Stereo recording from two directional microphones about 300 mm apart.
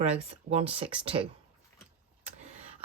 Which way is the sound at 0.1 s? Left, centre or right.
Right.